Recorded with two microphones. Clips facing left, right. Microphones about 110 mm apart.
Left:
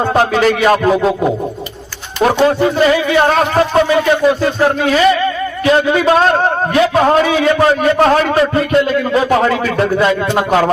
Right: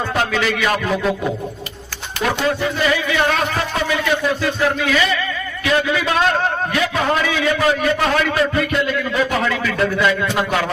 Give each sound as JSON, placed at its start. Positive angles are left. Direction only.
{"t": 0.0, "sound": "a man's voice", "side_deg": 35}